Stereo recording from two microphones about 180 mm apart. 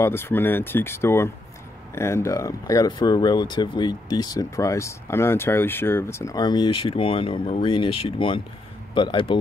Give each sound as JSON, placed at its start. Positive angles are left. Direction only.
{"t": 0.0, "sound": "speech", "side_deg": 15}